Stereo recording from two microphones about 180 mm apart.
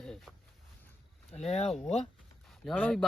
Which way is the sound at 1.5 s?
35° left (ahead or behind).